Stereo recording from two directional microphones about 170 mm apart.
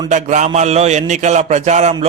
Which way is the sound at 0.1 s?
45° right (ahead or behind).